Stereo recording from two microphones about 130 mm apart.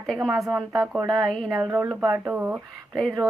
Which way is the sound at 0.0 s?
Centre (ahead or behind).